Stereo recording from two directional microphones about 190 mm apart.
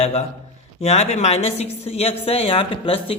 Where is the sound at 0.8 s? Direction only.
35° left (ahead or behind).